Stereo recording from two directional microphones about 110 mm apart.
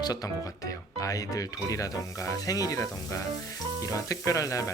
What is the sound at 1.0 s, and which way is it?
Speech, 30° left (ahead or behind).